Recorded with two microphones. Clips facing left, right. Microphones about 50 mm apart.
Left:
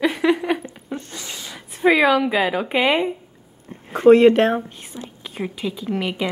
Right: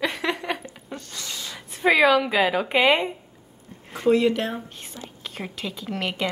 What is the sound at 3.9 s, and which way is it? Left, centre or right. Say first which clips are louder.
Speech: left 9 dB; left.